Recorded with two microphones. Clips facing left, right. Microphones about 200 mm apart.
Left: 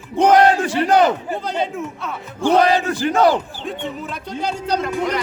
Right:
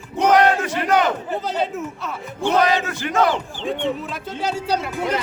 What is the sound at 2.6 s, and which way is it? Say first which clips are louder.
Battle cry: left 4 dB; 35° left (ahead or behind).